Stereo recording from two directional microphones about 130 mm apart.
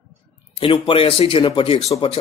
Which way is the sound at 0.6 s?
40° left (ahead or behind).